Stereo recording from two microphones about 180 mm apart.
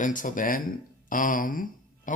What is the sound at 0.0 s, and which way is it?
Speech, 45° left (ahead or behind).